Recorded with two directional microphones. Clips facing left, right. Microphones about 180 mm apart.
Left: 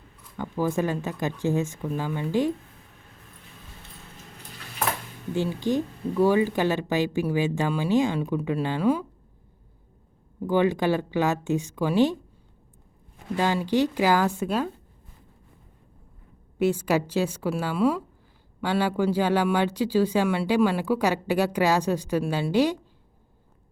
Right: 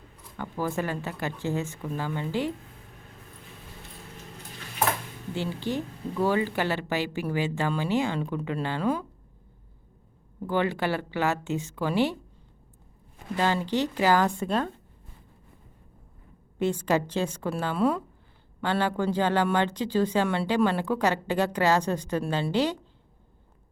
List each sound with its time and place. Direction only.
0.3 s speech: 15° left (ahead or behind)
5.3 s speech: 15° left (ahead or behind)
10.4 s speech: 15° left (ahead or behind)
13.3 s speech: 10° left (ahead or behind)
16.6 s speech: 10° left (ahead or behind)